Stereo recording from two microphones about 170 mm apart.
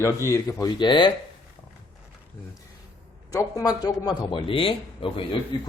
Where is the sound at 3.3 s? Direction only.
20° left (ahead or behind).